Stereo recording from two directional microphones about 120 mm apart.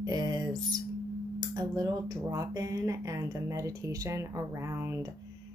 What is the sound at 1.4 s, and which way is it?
Speech, 30° right (ahead or behind).